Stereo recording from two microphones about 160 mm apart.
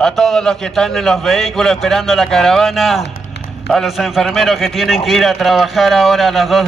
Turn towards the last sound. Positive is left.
turn(degrees=0)  # may be behind; listen again after turning